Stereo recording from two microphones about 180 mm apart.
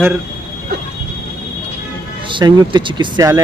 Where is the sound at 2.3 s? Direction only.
25° right (ahead or behind).